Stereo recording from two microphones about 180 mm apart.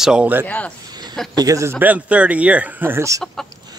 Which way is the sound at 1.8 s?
5° right (ahead or behind).